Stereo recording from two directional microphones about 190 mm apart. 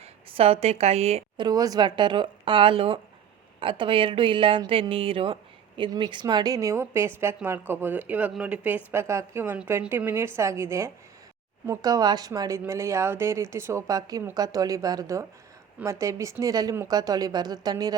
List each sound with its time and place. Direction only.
0.0 s a woman's voice: 30° right (ahead or behind)
1.5 s speech: 20° right (ahead or behind)